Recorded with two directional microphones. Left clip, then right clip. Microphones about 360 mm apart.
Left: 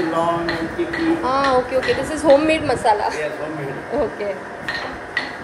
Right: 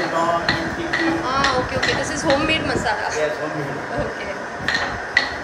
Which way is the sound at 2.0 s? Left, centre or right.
Centre.